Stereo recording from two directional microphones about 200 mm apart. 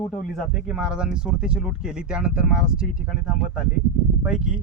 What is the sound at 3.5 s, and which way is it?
Speech, 45° left (ahead or behind).